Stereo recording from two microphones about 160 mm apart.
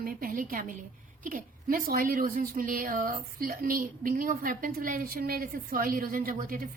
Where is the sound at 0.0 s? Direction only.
60° right (ahead or behind).